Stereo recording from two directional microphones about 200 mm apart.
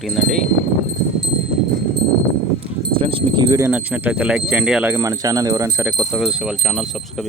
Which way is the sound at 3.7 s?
10° right (ahead or behind).